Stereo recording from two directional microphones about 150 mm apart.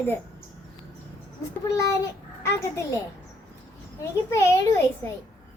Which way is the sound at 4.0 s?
20° left (ahead or behind).